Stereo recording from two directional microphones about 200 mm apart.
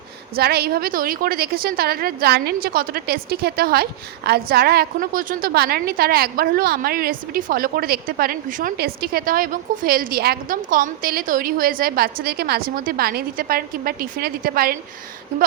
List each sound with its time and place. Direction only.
0.3 s a woman's voice: 50° right (ahead or behind)